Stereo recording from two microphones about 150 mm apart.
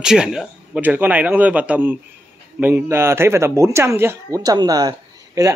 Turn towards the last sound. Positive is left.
turn(degrees=-25)  # may be behind; listen again after turning